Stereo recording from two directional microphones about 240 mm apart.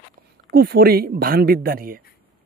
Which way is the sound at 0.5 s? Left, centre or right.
Right.